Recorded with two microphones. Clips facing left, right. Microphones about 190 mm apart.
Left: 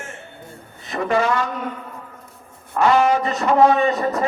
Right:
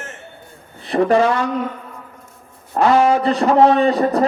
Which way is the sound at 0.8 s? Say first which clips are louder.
Right 6 dB; 35° right (ahead or behind).